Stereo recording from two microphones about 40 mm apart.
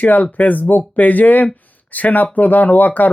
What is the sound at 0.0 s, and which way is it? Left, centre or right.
Speech, left.